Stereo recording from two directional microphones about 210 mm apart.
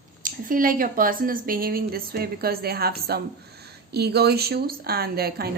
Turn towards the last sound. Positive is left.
turn(degrees=-45)  # may be behind; listen again after turning